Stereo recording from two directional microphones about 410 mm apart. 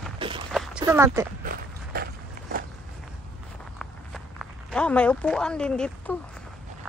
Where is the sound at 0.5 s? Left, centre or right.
Centre.